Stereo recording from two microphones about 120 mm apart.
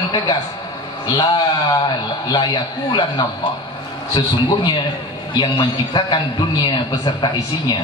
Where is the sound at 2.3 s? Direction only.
40° left (ahead or behind).